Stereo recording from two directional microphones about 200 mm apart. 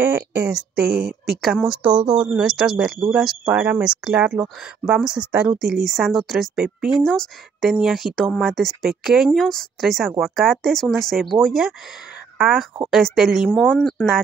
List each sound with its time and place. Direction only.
0.0 s speech: 10° right (ahead or behind)
0.8 s speech: 50° right (ahead or behind)
1.4 s a woman's voice: centre (ahead or behind)